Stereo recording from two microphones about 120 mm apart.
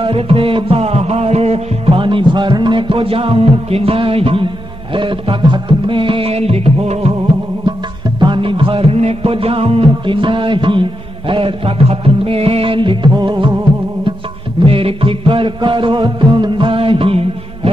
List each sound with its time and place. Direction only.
0.0 s music: 50° right (ahead or behind)
8.2 s music: 45° right (ahead or behind)
14.6 s music: 50° right (ahead or behind)